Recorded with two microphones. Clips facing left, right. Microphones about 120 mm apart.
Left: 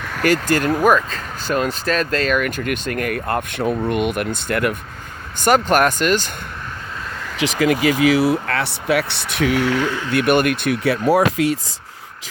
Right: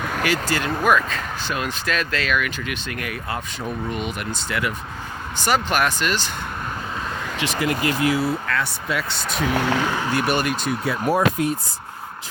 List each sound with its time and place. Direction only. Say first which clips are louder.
0.2 s speech: left 7 dB; 45° left (ahead or behind)
7.3 s speech: left 7 dB; 90° left; by 9.5 s 70° left (ahead or behind)
9.5 s speech: left 3 dB; 30° right (ahead or behind)
10.1 s speech: left 9 dB; 60° left (ahead or behind); by 11.5 s 85° left